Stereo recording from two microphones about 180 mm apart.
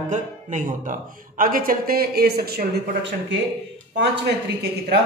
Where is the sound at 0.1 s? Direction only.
45° right (ahead or behind); by 3.3 s 70° right (ahead or behind).